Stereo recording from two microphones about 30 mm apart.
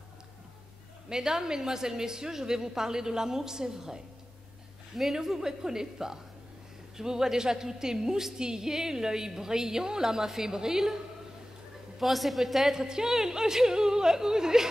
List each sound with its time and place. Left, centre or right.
1.0 s a woman's voice: right
4.9 s a woman's voice: centre
12.0 s a woman's voice: centre
12.7 s a woman's voice: centre